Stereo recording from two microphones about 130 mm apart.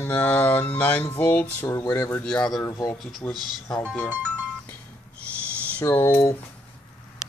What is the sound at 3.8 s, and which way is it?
Speech, 10° left (ahead or behind).